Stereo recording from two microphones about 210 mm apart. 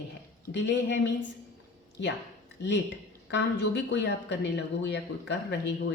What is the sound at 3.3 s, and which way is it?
A woman's voice, 55° left (ahead or behind).